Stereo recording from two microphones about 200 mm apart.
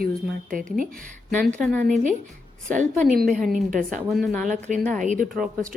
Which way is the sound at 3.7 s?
40° right (ahead or behind).